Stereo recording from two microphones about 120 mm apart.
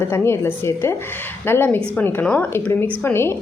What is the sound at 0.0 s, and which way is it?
A woman's voice, 20° left (ahead or behind).